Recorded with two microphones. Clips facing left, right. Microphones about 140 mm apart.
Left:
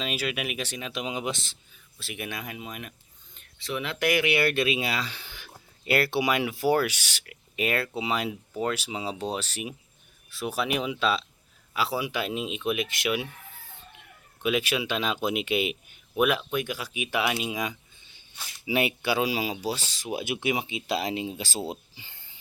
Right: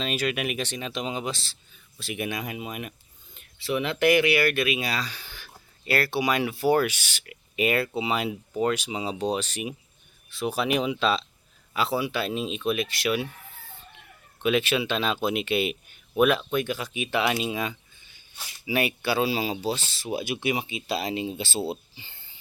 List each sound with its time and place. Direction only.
0.0 s speech: 5° left (ahead or behind)
2.0 s speech: centre (ahead or behind)
4.3 s speech: 25° left (ahead or behind); by 6.9 s 10° left (ahead or behind)
7.3 s speech: 5° right (ahead or behind); by 13.2 s 15° left (ahead or behind)
14.4 s speech: 10° left (ahead or behind)